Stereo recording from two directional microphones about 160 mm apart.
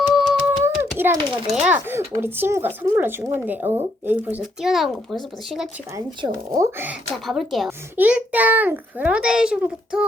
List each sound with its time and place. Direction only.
0.1 s music: centre (ahead or behind)
0.6 s a sound: 15° right (ahead or behind)
1.5 s speech: 10° right (ahead or behind)
6.2 s speech: 20° right (ahead or behind)
7.1 s speech: centre (ahead or behind)